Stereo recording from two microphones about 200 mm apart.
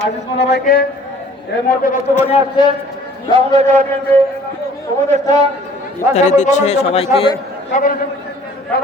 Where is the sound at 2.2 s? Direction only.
30° left (ahead or behind).